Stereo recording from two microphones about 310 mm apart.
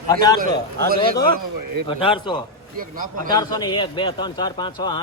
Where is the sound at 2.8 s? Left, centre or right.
Right.